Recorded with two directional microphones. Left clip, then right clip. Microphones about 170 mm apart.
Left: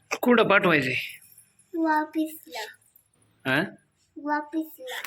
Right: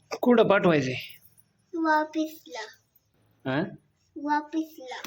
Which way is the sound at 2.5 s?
20° right (ahead or behind).